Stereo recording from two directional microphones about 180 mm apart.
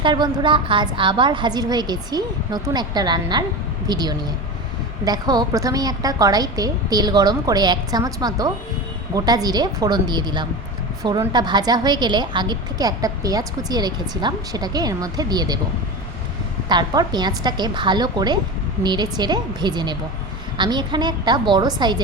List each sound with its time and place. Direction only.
0.0 s a woman's voice: 25° right (ahead or behind)
16.6 s a woman's voice: 25° right (ahead or behind)